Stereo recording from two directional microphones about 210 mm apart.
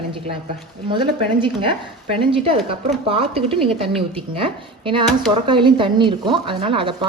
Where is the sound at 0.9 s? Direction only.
25° right (ahead or behind).